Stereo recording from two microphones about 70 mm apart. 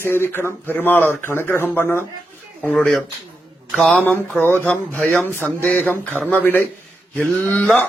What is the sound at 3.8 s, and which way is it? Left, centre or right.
Speech, left.